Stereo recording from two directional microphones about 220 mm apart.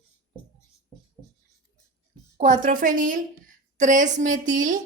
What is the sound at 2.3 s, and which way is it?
A woman's voice, 30° right (ahead or behind).